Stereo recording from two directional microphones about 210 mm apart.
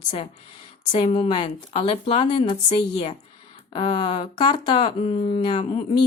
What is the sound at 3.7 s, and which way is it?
A woman's voice, 25° left (ahead or behind).